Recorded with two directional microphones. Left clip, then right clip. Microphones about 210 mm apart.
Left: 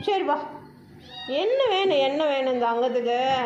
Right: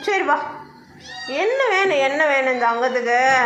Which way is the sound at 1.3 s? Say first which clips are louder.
Right 3 dB; 20° right (ahead or behind).